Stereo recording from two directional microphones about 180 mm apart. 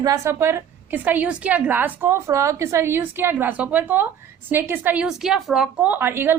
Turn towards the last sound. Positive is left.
turn(degrees=-10)  # may be behind; listen again after turning